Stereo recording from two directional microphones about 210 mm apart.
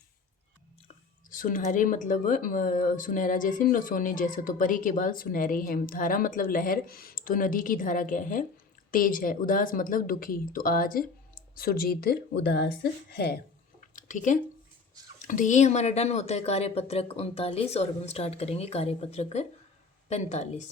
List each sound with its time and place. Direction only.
0.9 s a woman's voice: 40° left (ahead or behind)
13.9 s a sound: 35° left (ahead or behind)
15.2 s speech: 40° left (ahead or behind)